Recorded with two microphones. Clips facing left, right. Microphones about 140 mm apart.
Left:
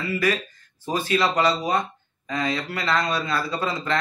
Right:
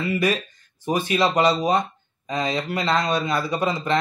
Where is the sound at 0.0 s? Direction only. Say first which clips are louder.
Right 2 dB; 20° right (ahead or behind).